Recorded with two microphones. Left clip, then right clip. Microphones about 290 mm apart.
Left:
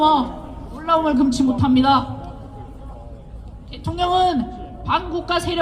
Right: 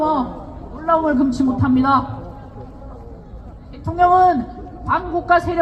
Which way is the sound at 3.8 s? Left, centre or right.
Left.